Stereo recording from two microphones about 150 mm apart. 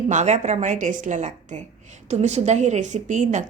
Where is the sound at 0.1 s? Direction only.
50° right (ahead or behind).